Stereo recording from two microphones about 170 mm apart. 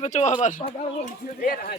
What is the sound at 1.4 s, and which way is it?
Speech, 60° left (ahead or behind).